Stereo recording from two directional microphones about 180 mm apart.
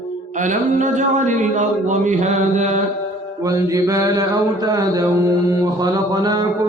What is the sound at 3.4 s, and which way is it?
Mantra, 20° right (ahead or behind).